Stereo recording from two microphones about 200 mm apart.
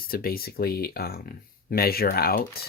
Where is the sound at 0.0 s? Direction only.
50° left (ahead or behind).